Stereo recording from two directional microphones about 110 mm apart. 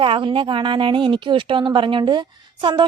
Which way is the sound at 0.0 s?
50° right (ahead or behind).